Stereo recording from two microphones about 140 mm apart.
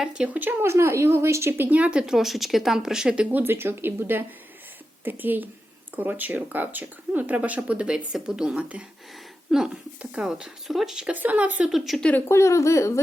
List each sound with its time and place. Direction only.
0.0 s a woman's voice: 5° right (ahead or behind)
12.3 s speech: 20° left (ahead or behind)